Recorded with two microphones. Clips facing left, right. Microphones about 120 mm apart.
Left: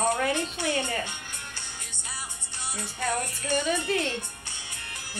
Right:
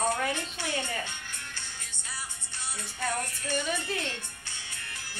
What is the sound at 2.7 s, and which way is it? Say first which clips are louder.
Music: left 3 dB; 15° left (ahead or behind).